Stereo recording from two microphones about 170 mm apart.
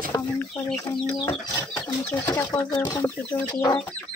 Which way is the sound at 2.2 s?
15° left (ahead or behind).